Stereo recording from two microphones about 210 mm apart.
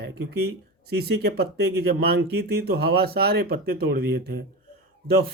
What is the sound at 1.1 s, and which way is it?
Speech, 50° right (ahead or behind).